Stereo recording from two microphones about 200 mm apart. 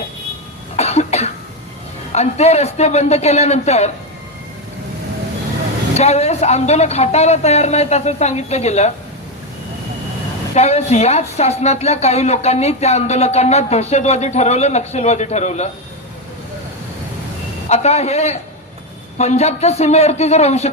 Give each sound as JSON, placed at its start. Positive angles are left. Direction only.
{"t": 0.8, "sound": "cough", "side_deg": 30}
{"t": 2.1, "sound": "a woman's voice", "side_deg": 35}
{"t": 6.0, "sound": "a woman's voice", "side_deg": 35}
{"t": 10.5, "sound": "a woman's voice", "side_deg": 35}
{"t": 17.7, "sound": "a woman's voice", "side_deg": 30}